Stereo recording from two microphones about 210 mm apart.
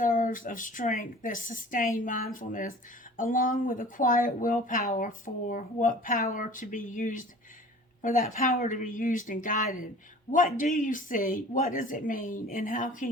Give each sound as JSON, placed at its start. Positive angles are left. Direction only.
{"t": 0.0, "sound": "speech", "side_deg": 40}